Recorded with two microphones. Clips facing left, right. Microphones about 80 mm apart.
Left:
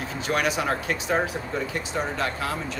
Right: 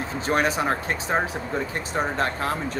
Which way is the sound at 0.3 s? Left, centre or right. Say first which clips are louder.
Right 2 dB; right.